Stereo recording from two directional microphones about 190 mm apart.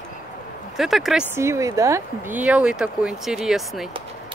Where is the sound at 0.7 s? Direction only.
Centre (ahead or behind).